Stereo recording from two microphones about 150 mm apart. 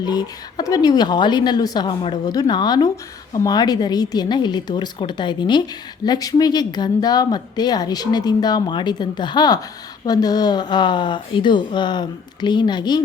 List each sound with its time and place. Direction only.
0.0 s speech: 30° left (ahead or behind)